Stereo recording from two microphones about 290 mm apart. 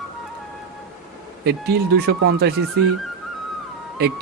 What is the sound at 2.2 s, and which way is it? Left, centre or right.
Speech, right.